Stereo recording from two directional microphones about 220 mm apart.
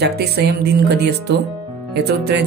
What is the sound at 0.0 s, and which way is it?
Speech, 45° right (ahead or behind).